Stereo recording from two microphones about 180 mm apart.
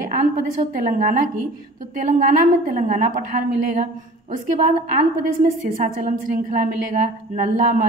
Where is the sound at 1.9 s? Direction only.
45° right (ahead or behind).